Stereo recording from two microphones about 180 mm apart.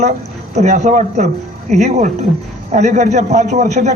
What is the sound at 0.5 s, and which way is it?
Speech, 40° right (ahead or behind).